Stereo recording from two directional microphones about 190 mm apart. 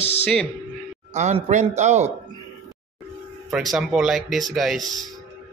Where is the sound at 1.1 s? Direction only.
40° right (ahead or behind).